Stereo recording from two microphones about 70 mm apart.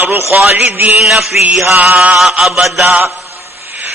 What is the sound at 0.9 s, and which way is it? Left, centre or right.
Mantra, centre.